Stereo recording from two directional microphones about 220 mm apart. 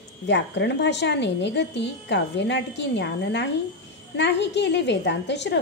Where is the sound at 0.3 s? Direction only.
50° left (ahead or behind).